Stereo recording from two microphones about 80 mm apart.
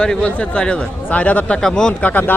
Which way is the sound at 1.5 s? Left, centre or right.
Centre.